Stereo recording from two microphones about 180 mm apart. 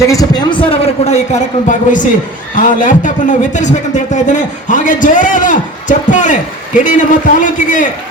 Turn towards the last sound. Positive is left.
turn(degrees=45)  # may be behind; listen again after turning